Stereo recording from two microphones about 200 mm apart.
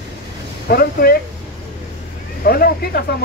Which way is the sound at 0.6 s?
50° left (ahead or behind).